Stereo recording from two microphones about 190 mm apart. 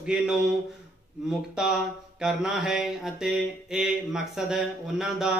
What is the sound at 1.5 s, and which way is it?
Speech, 5° right (ahead or behind).